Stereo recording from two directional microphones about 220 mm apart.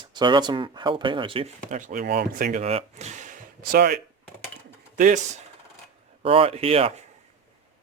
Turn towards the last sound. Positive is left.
turn(degrees=-25)  # may be behind; listen again after turning